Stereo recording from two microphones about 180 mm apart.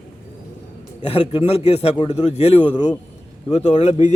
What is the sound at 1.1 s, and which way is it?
A man's voice, 30° left (ahead or behind).